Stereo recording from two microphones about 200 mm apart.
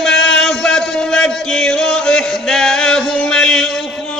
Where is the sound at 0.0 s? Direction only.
5° left (ahead or behind).